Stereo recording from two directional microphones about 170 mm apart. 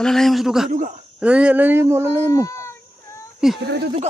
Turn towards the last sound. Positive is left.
turn(degrees=-90)